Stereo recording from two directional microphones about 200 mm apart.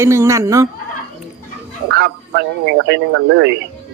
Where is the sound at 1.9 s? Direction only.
55° right (ahead or behind).